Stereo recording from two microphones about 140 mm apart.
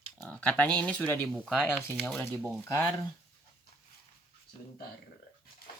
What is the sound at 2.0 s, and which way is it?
Speech, 15° left (ahead or behind).